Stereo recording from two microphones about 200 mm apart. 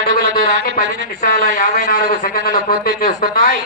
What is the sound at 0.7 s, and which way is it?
A man's voice, 45° left (ahead or behind).